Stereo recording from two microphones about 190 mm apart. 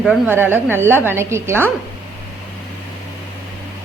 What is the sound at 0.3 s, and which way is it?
A woman's voice, 10° right (ahead or behind).